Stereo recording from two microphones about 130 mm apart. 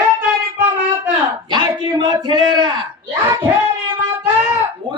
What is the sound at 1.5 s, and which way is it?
A man's voice, 35° right (ahead or behind).